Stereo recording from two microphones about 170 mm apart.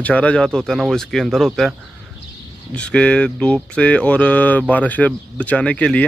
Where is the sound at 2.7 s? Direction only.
5° left (ahead or behind).